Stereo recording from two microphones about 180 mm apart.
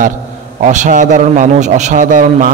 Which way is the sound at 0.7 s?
45° right (ahead or behind).